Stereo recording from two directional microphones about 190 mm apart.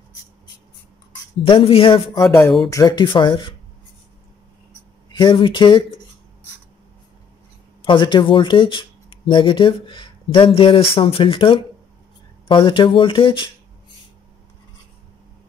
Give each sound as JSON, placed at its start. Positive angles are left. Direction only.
{"t": 1.4, "sound": "speech", "side_deg": 30}
{"t": 5.1, "sound": "speech", "side_deg": 25}
{"t": 7.8, "sound": "speech", "side_deg": 25}